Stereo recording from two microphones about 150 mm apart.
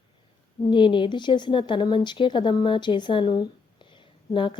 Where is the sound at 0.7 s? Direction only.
30° left (ahead or behind).